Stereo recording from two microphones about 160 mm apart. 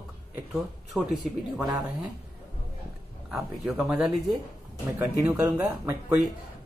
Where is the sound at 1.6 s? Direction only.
5° right (ahead or behind).